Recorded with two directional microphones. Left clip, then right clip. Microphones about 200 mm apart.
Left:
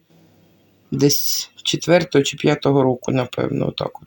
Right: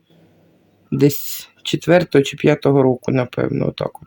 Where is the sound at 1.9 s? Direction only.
25° right (ahead or behind).